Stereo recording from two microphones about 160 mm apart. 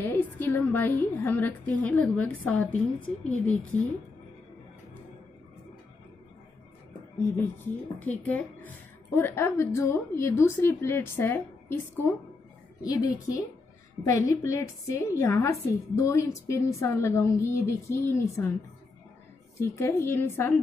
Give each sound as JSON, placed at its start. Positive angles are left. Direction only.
{"t": 0.0, "sound": "a woman's voice", "side_deg": 10}
{"t": 7.3, "sound": "a woman's voice", "side_deg": 10}
{"t": 19.6, "sound": "a woman's voice", "side_deg": 15}